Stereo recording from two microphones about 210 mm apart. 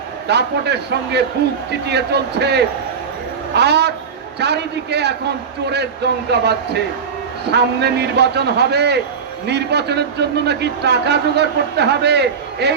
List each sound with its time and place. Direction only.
0.3 s a man's voice: 55° right (ahead or behind)
6.3 s a man's voice: 50° right (ahead or behind)